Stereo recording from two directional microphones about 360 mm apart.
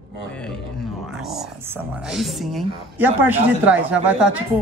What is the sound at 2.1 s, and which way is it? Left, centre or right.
A man's voice, centre.